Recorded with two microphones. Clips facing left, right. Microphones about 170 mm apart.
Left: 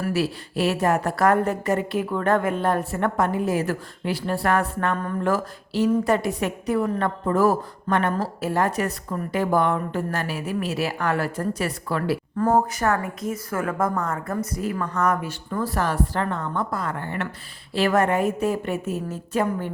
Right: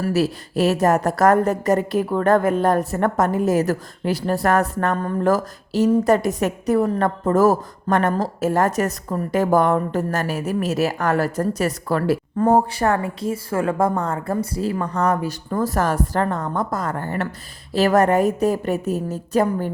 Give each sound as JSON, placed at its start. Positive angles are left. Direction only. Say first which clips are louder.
{"t": 0.0, "sound": "a woman's voice", "louder": "right 4 dB", "side_deg": -40}
{"t": 12.4, "sound": "a woman's voice", "louder": "right 3 dB", "side_deg": -30}